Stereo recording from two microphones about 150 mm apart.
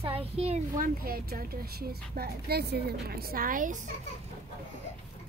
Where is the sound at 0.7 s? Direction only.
70° right (ahead or behind).